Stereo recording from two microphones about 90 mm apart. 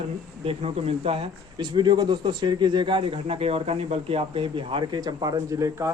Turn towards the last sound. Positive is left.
turn(degrees=-40)  # may be behind; listen again after turning